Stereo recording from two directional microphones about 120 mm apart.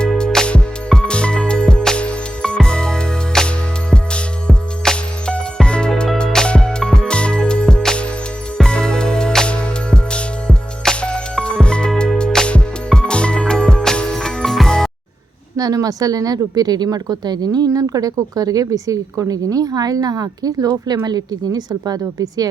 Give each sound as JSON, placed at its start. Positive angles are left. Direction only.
{"t": 0.0, "sound": "music", "side_deg": 5}
{"t": 15.5, "sound": "speech", "side_deg": -30}